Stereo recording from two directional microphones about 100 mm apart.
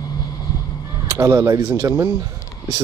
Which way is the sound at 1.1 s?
30° right (ahead or behind).